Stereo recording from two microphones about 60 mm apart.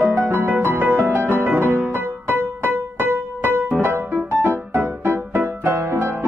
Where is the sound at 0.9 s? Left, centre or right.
Right.